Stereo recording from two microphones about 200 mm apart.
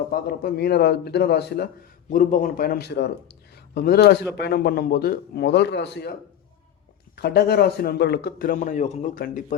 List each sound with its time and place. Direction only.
0.1 s a man's voice: 50° left (ahead or behind)
7.2 s a man's voice: 50° left (ahead or behind)